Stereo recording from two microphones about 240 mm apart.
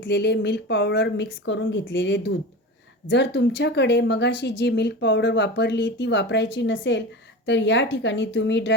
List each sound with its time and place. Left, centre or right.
0.0 s speech: left